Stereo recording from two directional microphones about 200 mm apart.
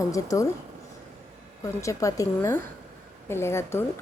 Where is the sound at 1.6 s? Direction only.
15° left (ahead or behind).